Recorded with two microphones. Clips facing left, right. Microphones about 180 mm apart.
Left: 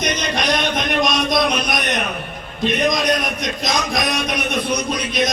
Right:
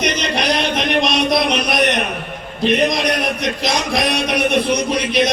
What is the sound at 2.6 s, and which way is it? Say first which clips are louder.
Music: right 2 dB; 30° right (ahead or behind).